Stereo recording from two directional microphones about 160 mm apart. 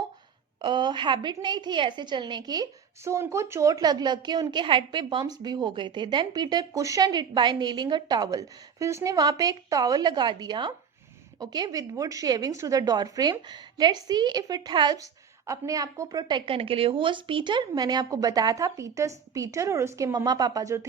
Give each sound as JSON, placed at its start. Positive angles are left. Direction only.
{"t": 0.6, "sound": "a woman's voice", "side_deg": -30}